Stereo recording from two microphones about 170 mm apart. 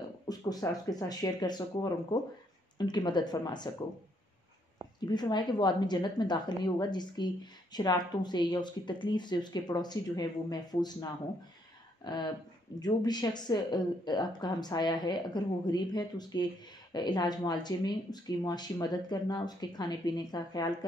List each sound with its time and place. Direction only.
0.5 s speech: 20° left (ahead or behind)
5.0 s speech: 25° left (ahead or behind)